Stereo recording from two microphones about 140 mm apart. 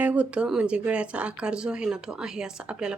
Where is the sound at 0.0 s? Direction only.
10° right (ahead or behind).